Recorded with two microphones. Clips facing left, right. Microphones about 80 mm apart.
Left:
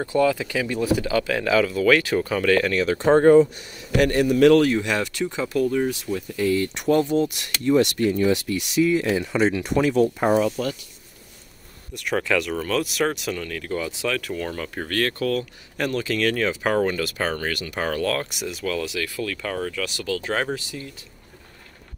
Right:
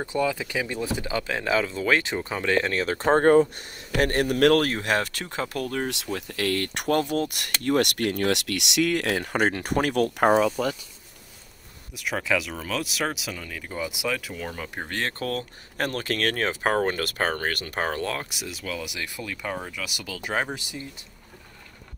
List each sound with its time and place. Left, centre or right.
0.0 s speech: centre; by 5.9 s right
5.9 s speech: right
11.9 s speech: centre
14.9 s speech: right
15.1 s speech: right
18.1 s speech: centre
18.8 s speech: centre